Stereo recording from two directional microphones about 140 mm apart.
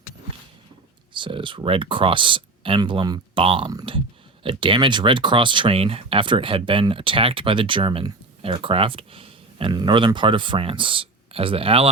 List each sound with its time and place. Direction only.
1.1 s speech: 35° right (ahead or behind)